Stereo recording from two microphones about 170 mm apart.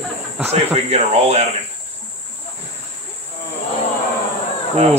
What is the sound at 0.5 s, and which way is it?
Speech, 40° right (ahead or behind).